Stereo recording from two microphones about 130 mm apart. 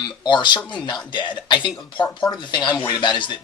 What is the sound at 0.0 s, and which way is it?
Speech, 35° left (ahead or behind).